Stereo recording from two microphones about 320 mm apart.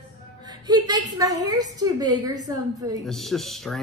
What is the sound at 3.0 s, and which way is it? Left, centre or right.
Speech, centre.